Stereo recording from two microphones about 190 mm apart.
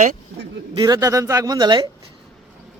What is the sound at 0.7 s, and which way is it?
A man's voice, 20° right (ahead or behind).